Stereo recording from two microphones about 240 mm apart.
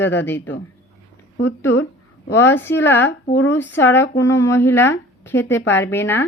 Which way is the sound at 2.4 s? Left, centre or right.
Centre.